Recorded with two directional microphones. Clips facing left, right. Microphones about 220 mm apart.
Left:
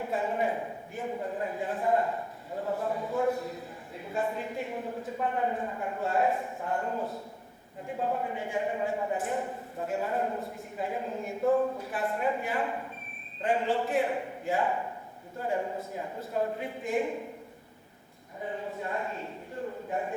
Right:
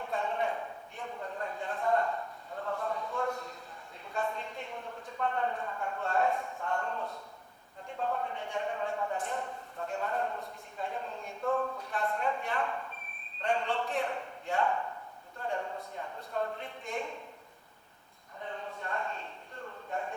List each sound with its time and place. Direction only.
0.0 s a sound: 5° left (ahead or behind)
2.6 s speech: 15° left (ahead or behind)
11.4 s speech: 15° left (ahead or behind)
18.4 s speech: 10° left (ahead or behind)